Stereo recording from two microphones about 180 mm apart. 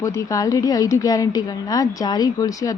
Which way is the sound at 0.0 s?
20° left (ahead or behind).